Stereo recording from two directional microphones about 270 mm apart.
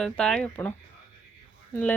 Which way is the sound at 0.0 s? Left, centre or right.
Centre.